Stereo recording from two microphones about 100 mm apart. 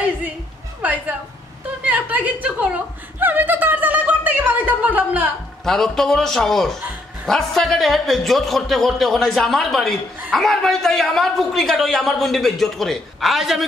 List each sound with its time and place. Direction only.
1.9 s chuckle: 15° right (ahead or behind)
5.7 s a man's voice: 5° left (ahead or behind)